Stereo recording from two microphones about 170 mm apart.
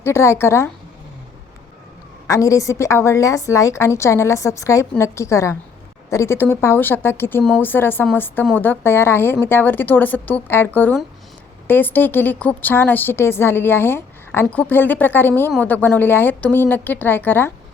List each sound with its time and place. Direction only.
0.0 s a woman's voice: 15° left (ahead or behind)
2.2 s a woman's voice: 20° left (ahead or behind)
11.7 s a woman's voice: 10° left (ahead or behind)